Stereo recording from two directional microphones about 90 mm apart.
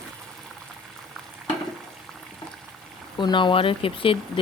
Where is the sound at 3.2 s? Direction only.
60° left (ahead or behind); by 4.1 s 85° left.